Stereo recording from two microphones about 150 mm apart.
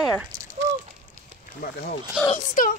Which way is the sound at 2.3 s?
65° left (ahead or behind).